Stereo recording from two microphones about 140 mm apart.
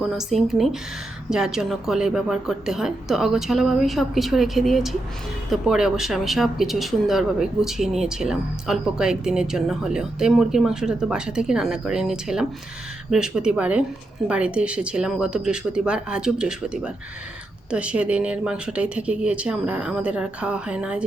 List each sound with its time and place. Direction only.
0.1 s speech: centre (ahead or behind)